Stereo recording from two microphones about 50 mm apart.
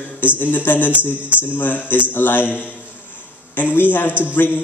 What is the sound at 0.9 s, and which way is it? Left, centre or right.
Speech, right.